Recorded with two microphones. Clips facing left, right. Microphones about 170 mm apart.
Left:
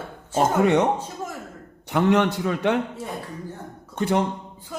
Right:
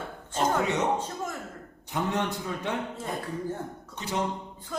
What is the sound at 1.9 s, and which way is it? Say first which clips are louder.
Speech: left 9 dB; 75° left (ahead or behind).